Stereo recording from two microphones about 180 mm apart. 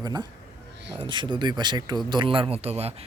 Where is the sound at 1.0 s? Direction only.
25° right (ahead or behind).